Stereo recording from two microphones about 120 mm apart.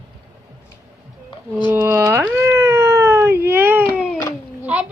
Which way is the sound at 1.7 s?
20° right (ahead or behind).